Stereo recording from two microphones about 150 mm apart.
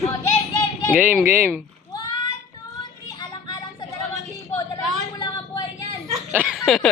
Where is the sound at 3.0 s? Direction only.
25° left (ahead or behind).